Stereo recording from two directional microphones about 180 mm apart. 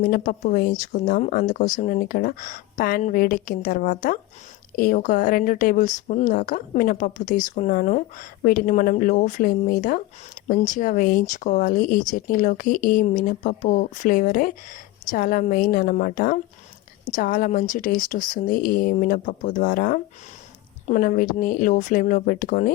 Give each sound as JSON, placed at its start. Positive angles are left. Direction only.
{"t": 0.0, "sound": "speech", "side_deg": 50}